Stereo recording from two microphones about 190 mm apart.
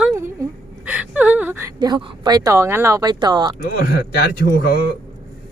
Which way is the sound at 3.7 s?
60° left (ahead or behind).